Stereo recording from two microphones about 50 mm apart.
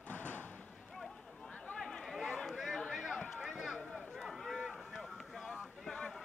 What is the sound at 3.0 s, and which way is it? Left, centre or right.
Run, centre.